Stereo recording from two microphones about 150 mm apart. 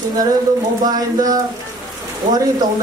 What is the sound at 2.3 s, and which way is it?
Speech, 25° right (ahead or behind).